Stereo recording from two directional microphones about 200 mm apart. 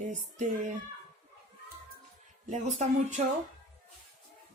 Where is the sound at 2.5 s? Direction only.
35° right (ahead or behind).